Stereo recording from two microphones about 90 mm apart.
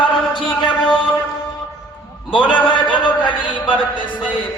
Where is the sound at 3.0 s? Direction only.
60° left (ahead or behind).